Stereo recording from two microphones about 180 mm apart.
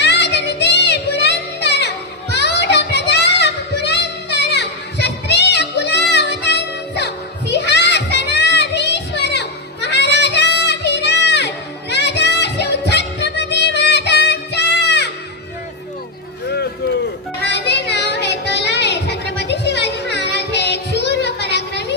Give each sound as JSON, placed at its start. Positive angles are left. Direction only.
{"t": 0.0, "sound": "music", "side_deg": 70}
{"t": 2.6, "sound": "child singing", "side_deg": 70}
{"t": 7.5, "sound": "music", "side_deg": 70}
{"t": 17.4, "sound": "music", "side_deg": 70}